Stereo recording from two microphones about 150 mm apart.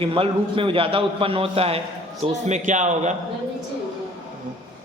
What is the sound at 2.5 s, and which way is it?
Speech, 55° right (ahead or behind).